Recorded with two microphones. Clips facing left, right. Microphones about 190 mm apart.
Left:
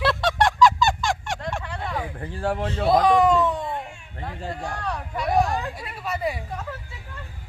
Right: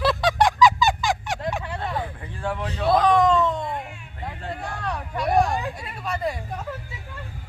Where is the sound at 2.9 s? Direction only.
10° left (ahead or behind).